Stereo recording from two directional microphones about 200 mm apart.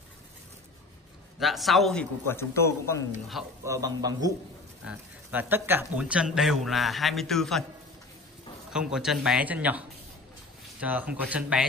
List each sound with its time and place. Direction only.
1.4 s speech: centre (ahead or behind)
3.6 s speech: 15° right (ahead or behind); by 7.6 s centre (ahead or behind)
8.7 s speech: 5° right (ahead or behind)